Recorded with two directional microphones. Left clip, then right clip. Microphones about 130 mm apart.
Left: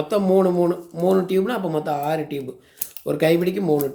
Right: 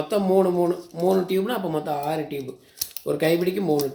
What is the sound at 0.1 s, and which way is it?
Speech, 25° left (ahead or behind).